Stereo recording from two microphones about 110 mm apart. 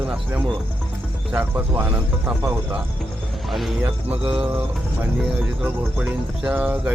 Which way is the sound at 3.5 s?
Centre (ahead or behind).